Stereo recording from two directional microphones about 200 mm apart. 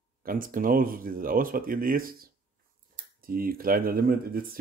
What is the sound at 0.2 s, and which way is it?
Speech, 45° right (ahead or behind).